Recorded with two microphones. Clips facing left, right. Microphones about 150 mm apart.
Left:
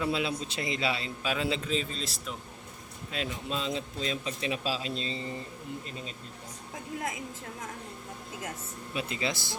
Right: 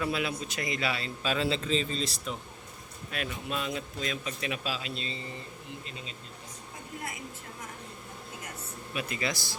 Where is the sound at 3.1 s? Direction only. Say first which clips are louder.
Left 1 dB; 25° left (ahead or behind).